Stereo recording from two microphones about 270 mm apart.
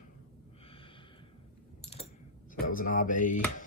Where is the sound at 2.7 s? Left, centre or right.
Left.